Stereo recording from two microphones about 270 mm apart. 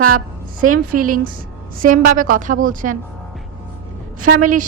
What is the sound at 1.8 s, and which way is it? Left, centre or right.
A woman's voice, right.